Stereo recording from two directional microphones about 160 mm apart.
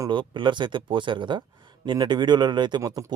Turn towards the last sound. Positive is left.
turn(degrees=-25)  # may be behind; listen again after turning